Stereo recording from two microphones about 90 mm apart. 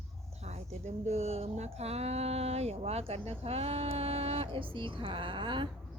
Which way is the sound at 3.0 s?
90° right.